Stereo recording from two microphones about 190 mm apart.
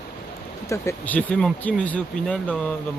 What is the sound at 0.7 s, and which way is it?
Speech, 10° left (ahead or behind).